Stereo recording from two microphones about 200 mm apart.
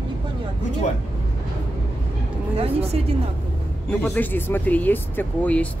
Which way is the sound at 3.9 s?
10° left (ahead or behind).